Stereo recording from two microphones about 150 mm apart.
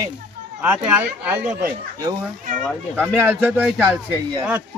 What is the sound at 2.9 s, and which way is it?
Speech, 10° right (ahead or behind).